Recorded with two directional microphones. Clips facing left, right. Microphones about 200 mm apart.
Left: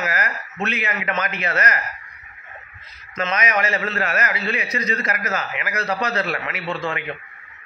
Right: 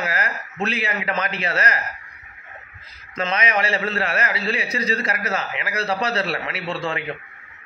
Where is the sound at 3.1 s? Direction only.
30° right (ahead or behind).